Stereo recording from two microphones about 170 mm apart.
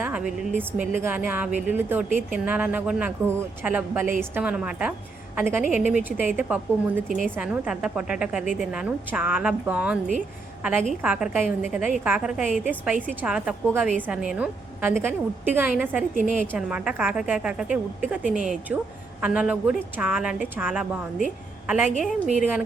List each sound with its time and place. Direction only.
0.0 s a woman's voice: 5° right (ahead or behind)
16.1 s a woman's voice: 50° right (ahead or behind)
16.6 s a woman's voice: 5° right (ahead or behind)
22.4 s a woman's voice: 5° right (ahead or behind)